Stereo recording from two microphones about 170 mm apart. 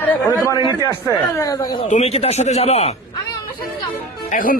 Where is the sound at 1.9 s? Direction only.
40° left (ahead or behind).